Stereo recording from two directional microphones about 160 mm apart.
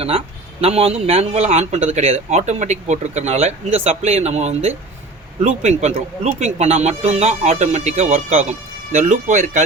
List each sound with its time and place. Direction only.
0.6 s speech: 40° right (ahead or behind)